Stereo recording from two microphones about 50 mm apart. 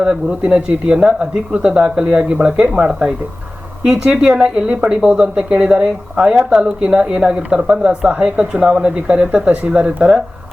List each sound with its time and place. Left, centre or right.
0.0 s a woman's voice: right